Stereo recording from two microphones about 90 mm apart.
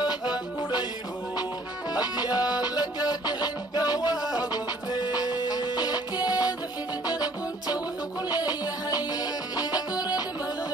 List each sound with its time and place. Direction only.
2.0 s music: 50° left (ahead or behind)